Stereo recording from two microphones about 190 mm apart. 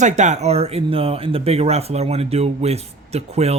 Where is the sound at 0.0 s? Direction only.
40° right (ahead or behind).